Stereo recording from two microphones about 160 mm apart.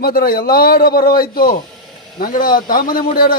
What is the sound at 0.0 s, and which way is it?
A man's voice, 65° left (ahead or behind).